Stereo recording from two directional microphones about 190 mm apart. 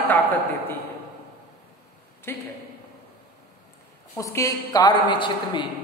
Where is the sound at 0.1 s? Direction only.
10° left (ahead or behind).